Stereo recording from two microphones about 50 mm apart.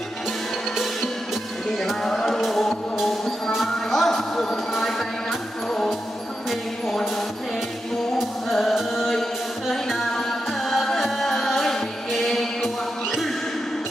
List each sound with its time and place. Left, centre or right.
2.2 s music: centre